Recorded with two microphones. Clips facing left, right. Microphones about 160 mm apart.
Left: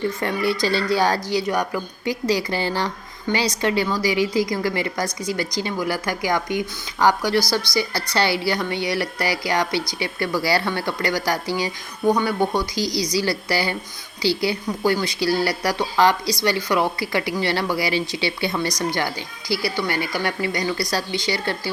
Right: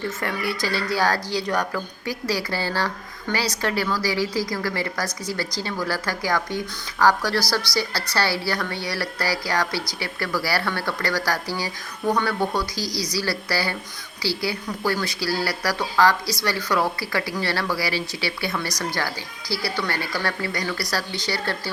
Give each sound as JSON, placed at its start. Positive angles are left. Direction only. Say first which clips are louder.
{"t": 0.2, "sound": "a woman's voice", "louder": "left 5 dB", "side_deg": 25}
{"t": 7.7, "sound": "a woman's voice", "louder": "left 3 dB", "side_deg": -10}
{"t": 8.1, "sound": "a woman's voice", "louder": "left 3 dB", "side_deg": 20}
{"t": 12.8, "sound": "a woman's voice", "louder": "left 5 dB", "side_deg": -5}
{"t": 13.1, "sound": "a woman's voice", "louder": "left 2 dB", "side_deg": 20}